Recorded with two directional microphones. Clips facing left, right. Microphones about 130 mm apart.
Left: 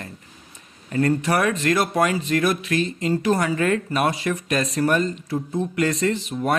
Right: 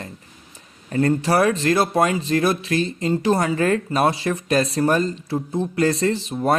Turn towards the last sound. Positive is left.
turn(degrees=-30)  # may be behind; listen again after turning